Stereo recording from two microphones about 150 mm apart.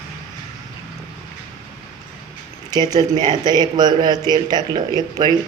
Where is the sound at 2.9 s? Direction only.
25° right (ahead or behind).